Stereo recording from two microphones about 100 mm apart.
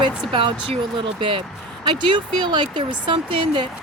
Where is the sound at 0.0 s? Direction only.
55° right (ahead or behind).